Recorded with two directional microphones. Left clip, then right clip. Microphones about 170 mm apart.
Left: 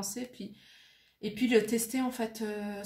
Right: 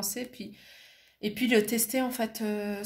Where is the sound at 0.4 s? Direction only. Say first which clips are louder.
Right 3 dB; 40° right (ahead or behind).